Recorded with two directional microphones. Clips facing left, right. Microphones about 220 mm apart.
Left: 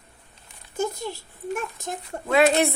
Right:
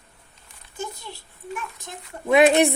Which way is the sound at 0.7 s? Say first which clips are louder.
Left 7 dB; 45° left (ahead or behind).